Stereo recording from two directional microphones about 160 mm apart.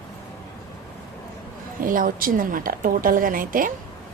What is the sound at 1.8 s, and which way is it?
A woman's voice, 60° right (ahead or behind).